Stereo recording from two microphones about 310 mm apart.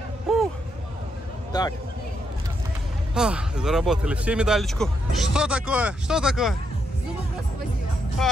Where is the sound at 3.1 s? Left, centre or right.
Centre.